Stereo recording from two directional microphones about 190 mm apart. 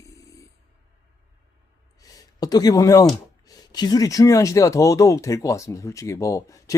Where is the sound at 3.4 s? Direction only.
20° left (ahead or behind).